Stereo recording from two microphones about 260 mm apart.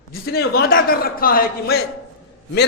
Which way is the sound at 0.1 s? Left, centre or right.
Left.